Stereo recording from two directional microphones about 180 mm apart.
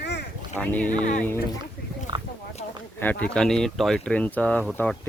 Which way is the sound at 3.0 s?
10° left (ahead or behind).